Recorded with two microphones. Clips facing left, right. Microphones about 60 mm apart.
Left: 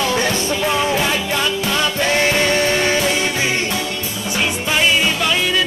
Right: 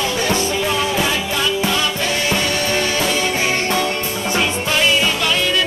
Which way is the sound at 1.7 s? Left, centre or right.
Left.